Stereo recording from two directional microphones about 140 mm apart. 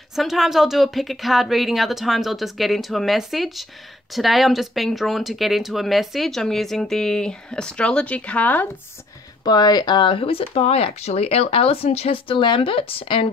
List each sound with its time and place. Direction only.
0.1 s speech: centre (ahead or behind)
9.4 s speech: 30° left (ahead or behind)